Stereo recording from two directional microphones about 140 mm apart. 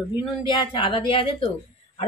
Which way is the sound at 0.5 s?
35° left (ahead or behind).